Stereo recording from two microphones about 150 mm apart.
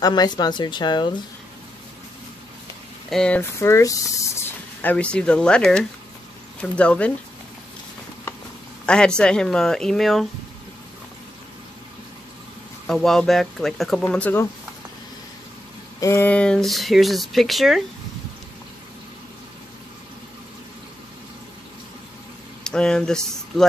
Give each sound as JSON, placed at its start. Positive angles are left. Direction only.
{"t": 0.0, "sound": "speech", "side_deg": 25}
{"t": 3.1, "sound": "speech", "side_deg": 5}
{"t": 3.5, "sound": "speech", "side_deg": 20}
{"t": 8.8, "sound": "speech", "side_deg": 5}
{"t": 12.8, "sound": "speech", "side_deg": 5}
{"t": 14.1, "sound": "speech", "side_deg": 10}
{"t": 16.0, "sound": "speech", "side_deg": 15}
{"t": 22.6, "sound": "speech", "side_deg": 5}